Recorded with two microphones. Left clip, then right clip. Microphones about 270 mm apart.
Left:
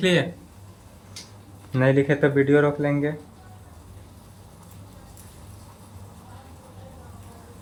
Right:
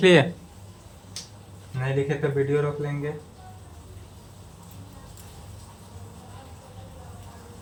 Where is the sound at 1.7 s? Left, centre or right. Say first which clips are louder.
Left 7 dB; left.